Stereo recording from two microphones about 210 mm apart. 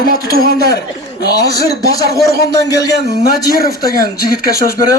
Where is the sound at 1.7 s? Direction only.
50° left (ahead or behind).